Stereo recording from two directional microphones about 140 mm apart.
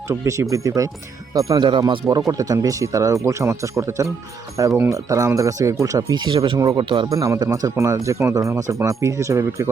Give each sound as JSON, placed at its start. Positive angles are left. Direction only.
{"t": 0.1, "sound": "speech", "side_deg": -20}
{"t": 2.0, "sound": "speech", "side_deg": -25}
{"t": 7.1, "sound": "speech", "side_deg": -25}